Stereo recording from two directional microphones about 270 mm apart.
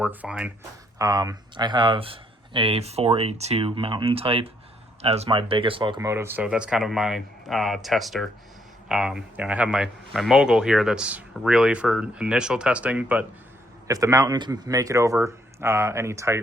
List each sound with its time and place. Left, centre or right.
0.0 s a man's voice: centre